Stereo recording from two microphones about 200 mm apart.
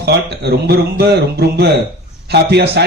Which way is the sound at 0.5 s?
55° right (ahead or behind).